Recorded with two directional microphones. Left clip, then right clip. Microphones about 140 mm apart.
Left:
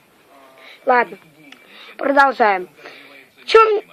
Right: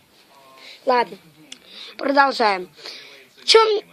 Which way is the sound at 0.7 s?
40° right (ahead or behind).